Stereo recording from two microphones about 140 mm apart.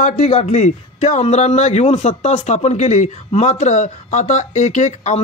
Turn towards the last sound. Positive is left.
turn(degrees=55)  # may be behind; listen again after turning